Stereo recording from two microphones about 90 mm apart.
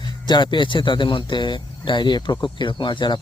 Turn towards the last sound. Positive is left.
turn(degrees=55)  # may be behind; listen again after turning